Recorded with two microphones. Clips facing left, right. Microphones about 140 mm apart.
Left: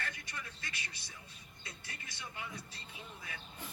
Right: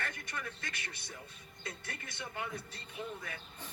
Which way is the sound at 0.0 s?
55° right (ahead or behind).